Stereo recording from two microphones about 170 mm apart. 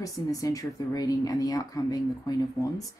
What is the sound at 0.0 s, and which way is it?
Speech, 20° left (ahead or behind).